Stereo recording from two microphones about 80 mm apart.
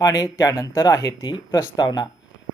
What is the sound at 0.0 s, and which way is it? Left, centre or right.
Speech, left.